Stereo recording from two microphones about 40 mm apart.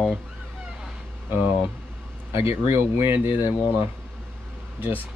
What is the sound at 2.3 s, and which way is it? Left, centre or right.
Speech, right.